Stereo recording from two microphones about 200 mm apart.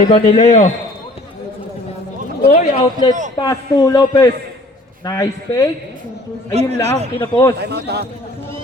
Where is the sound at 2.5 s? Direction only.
25° left (ahead or behind).